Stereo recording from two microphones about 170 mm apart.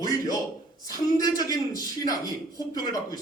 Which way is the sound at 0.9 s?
20° left (ahead or behind).